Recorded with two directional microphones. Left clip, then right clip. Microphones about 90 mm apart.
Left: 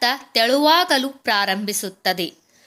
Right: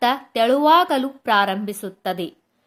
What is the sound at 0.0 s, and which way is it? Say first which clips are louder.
A woman's voice: even; 20° right (ahead or behind).